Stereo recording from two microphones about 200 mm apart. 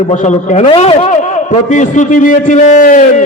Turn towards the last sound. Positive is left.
turn(degrees=40)  # may be behind; listen again after turning